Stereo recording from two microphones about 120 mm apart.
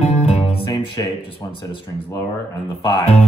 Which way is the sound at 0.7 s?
40° left (ahead or behind).